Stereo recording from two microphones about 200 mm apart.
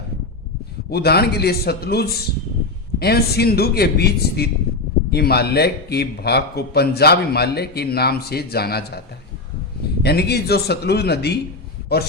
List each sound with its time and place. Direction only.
0.9 s a man's voice: 55° left (ahead or behind)
10.0 s speech: 55° left (ahead or behind)